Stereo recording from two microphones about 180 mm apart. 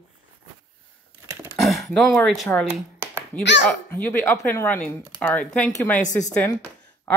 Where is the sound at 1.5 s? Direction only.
Centre (ahead or behind).